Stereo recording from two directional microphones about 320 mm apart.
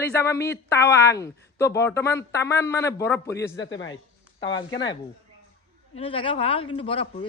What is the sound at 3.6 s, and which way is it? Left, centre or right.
Speech, left.